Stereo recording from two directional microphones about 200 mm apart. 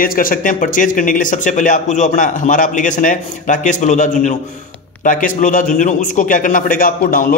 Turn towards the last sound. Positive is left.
turn(degrees=45)  # may be behind; listen again after turning